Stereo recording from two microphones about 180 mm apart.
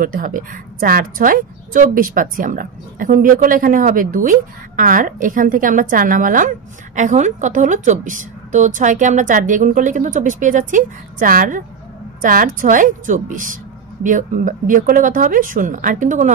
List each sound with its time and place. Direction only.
0.0 s a woman's voice: 50° right (ahead or behind)